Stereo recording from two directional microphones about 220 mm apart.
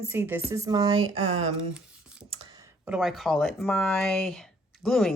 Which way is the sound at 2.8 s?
5° right (ahead or behind).